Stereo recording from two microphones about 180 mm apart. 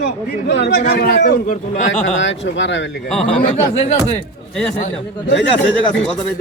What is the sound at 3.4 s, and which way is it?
Speech, 35° left (ahead or behind).